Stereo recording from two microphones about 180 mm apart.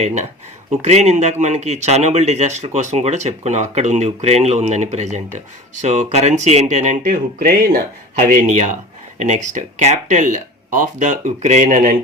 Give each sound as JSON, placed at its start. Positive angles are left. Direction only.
{"t": 0.0, "sound": "speech", "side_deg": -40}